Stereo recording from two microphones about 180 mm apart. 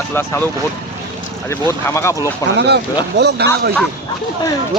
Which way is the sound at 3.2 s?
65° right (ahead or behind).